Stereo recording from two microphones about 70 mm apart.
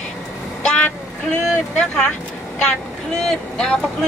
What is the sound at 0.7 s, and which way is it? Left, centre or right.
Vehicle, centre.